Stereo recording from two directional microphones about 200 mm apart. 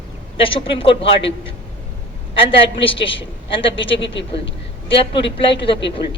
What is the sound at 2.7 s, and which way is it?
Speech, 25° left (ahead or behind).